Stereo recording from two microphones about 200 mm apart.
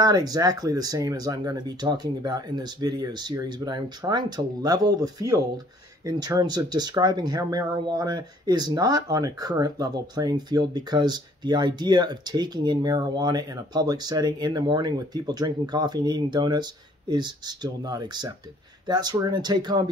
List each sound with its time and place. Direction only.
0.0 s speech: 20° right (ahead or behind)